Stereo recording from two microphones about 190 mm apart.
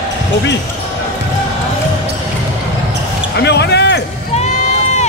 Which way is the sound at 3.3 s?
60° left (ahead or behind).